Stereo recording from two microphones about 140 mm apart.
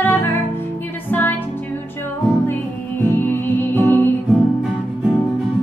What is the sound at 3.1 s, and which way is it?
Music, 15° left (ahead or behind).